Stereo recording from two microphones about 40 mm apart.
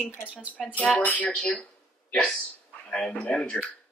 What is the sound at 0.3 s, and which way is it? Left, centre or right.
Speech, right.